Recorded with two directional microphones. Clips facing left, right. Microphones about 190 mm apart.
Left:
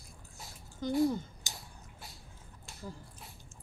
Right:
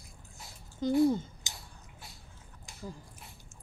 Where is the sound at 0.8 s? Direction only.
20° right (ahead or behind).